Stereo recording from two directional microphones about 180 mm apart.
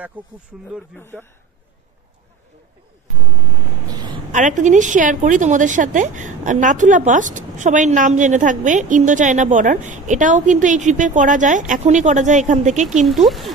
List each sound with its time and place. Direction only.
0.2 s speech: 10° right (ahead or behind)
0.9 s speech: 10° left (ahead or behind)
3.8 s a sound: 25° right (ahead or behind)
4.3 s a woman's voice: 45° right (ahead or behind)
13.0 s speech: centre (ahead or behind)